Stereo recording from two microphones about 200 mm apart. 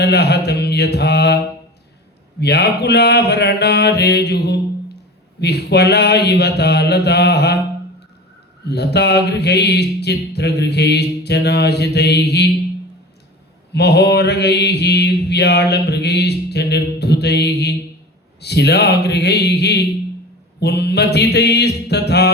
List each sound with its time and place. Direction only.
0.0 s mantra: 55° left (ahead or behind)
2.4 s mantra: 55° left (ahead or behind)
8.6 s mantra: 55° left (ahead or behind)
13.7 s mantra: 55° left (ahead or behind)